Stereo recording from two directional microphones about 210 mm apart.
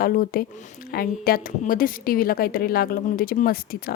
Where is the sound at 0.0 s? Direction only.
45° left (ahead or behind).